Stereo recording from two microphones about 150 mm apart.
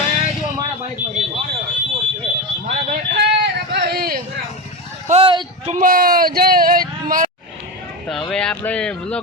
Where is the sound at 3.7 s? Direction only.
90° right.